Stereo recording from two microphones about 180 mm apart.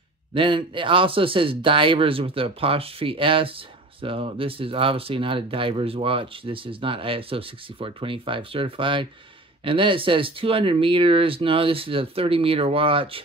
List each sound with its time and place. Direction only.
0.3 s a man's voice: 30° right (ahead or behind)